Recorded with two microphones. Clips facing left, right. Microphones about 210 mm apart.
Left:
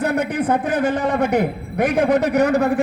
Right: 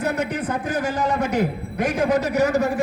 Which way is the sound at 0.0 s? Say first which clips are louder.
Left 4 dB; 60° left (ahead or behind).